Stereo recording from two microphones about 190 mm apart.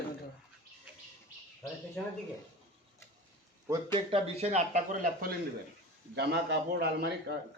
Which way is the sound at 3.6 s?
15° right (ahead or behind).